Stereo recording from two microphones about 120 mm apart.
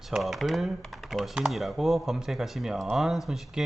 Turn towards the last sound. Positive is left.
turn(degrees=0)  # may be behind; listen again after turning